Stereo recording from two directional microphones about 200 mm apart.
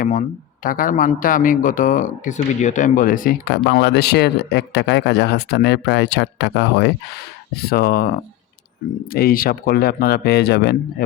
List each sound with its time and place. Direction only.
0.0 s a man's voice: 40° left (ahead or behind)